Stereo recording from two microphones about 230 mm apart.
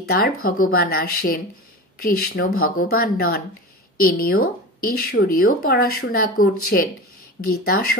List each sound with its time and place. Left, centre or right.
0.0 s speech: left